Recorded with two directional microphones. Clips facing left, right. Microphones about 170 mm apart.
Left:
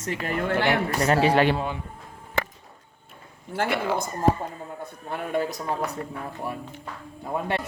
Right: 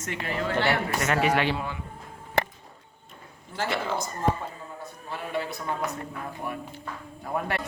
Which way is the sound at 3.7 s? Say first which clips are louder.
Left 3 dB; 10° left (ahead or behind).